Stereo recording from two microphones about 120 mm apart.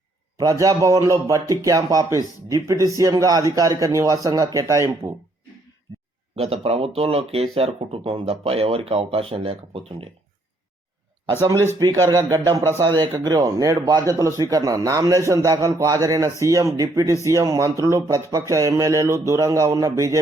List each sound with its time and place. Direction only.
0.3 s speech: 30° right (ahead or behind)
6.3 s speech: 55° right (ahead or behind)
11.4 s speech: 25° right (ahead or behind)